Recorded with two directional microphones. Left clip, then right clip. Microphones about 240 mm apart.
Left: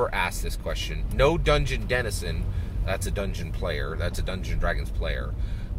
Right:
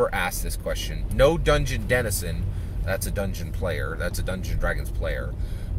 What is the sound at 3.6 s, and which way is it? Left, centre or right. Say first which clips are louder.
Speech: right 2 dB; centre.